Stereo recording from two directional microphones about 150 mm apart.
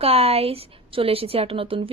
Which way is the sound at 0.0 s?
40° right (ahead or behind).